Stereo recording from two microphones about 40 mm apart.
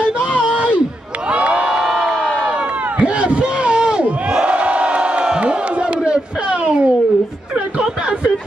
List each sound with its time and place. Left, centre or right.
1.3 s crowd: right
2.1 s crowd: left
3.0 s battle cry: right
4.5 s crowd: right
7.5 s a sound: right